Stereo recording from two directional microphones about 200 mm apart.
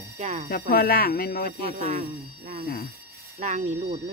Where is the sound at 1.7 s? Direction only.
35° right (ahead or behind).